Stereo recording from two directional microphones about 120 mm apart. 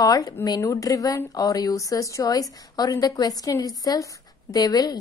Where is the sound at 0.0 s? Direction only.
30° left (ahead or behind).